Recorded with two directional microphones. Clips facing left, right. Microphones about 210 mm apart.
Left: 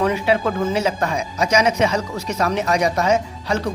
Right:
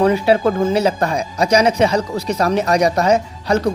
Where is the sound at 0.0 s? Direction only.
35° right (ahead or behind).